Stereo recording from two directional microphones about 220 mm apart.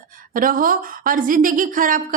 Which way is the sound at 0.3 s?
40° right (ahead or behind).